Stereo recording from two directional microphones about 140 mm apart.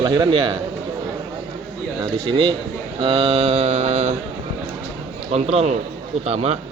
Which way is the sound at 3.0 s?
40° right (ahead or behind).